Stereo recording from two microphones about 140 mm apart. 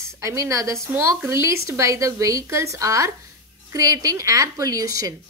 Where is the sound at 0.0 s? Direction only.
20° right (ahead or behind).